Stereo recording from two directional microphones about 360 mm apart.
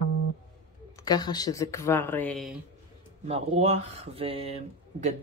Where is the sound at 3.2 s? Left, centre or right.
Centre.